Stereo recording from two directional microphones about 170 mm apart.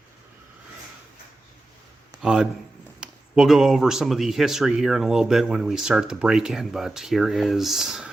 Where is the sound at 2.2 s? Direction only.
5° right (ahead or behind).